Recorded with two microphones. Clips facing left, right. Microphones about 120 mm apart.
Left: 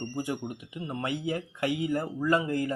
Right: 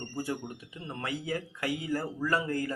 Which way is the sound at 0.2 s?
15° left (ahead or behind).